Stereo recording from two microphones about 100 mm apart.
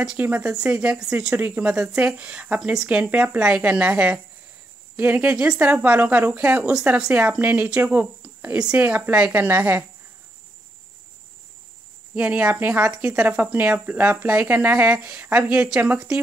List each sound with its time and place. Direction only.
0.2 s a woman's voice: 20° right (ahead or behind)
12.2 s a woman's voice: 15° right (ahead or behind)